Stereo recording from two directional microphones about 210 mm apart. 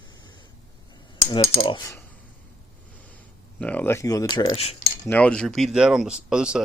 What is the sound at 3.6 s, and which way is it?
Speech, 5° left (ahead or behind).